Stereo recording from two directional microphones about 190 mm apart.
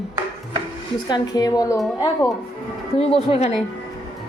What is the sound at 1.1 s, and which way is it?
Speech, 20° left (ahead or behind).